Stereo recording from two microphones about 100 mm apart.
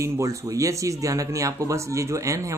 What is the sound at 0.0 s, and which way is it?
Speech, 30° right (ahead or behind).